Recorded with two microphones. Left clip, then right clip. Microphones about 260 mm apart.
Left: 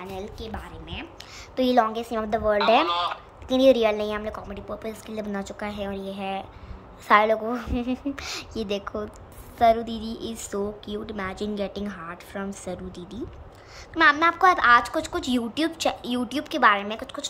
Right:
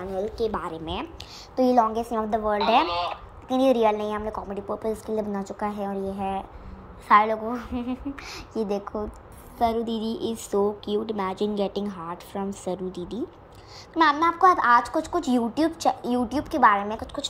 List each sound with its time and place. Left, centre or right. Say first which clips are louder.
0.2 s a woman's voice: right 9 dB; centre
1.6 s a woman's voice: right 1 dB; centre
4.7 s a woman's voice: right 7 dB; centre
8.5 s a woman's voice: right 3 dB; centre
8.8 s a woman's voice: even; left
9.6 s a woman's voice: left 4 dB; centre